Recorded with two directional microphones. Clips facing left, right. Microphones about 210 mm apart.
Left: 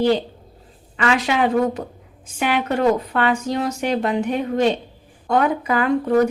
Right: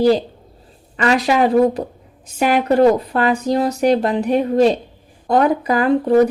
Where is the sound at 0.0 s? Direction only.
35° right (ahead or behind).